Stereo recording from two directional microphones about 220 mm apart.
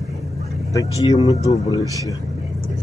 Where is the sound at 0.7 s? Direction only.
15° left (ahead or behind).